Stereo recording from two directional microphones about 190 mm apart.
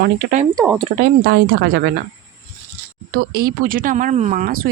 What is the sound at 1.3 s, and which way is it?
Speech, 60° right (ahead or behind).